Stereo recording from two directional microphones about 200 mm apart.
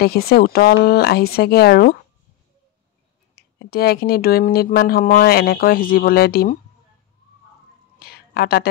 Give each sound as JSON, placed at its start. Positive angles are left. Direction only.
{"t": 0.0, "sound": "speech", "side_deg": 50}
{"t": 3.3, "sound": "speech", "side_deg": 50}
{"t": 8.0, "sound": "a sound", "side_deg": 50}